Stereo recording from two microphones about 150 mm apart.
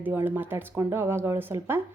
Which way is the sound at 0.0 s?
10° right (ahead or behind).